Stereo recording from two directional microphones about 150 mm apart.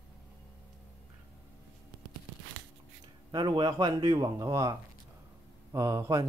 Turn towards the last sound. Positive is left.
turn(degrees=-20)  # may be behind; listen again after turning